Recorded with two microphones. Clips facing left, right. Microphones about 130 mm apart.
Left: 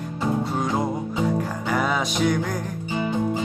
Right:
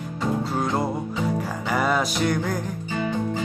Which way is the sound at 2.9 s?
20° left (ahead or behind).